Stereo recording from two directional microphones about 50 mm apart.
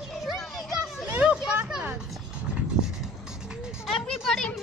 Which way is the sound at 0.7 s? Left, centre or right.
Centre.